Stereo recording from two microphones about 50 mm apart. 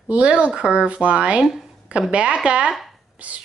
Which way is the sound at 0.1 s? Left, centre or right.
Right.